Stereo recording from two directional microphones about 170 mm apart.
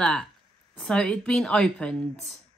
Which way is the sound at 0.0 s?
5° left (ahead or behind).